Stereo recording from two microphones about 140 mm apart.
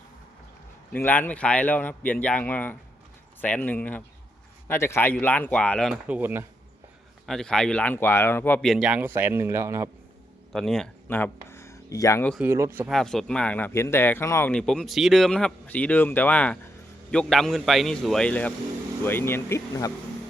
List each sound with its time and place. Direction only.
0.9 s speech: 15° left (ahead or behind)
6.1 s speech: 15° right (ahead or behind)
7.3 s speech: 5° left (ahead or behind)
8.6 s speech: 5° right (ahead or behind); by 9.9 s 20° right (ahead or behind)
10.5 s a man's voice: 5° left (ahead or behind)
11.1 s speech: 15° left (ahead or behind)
11.4 s a sound: 20° left (ahead or behind)
12.4 s speech: 20° right (ahead or behind)
12.9 s speech: 5° left (ahead or behind)
14.5 s a man's voice: 5° left (ahead or behind)